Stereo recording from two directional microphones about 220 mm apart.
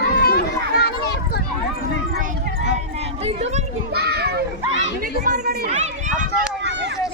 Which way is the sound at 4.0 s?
45° right (ahead or behind).